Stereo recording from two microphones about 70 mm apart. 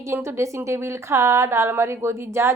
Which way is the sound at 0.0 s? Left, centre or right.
Right.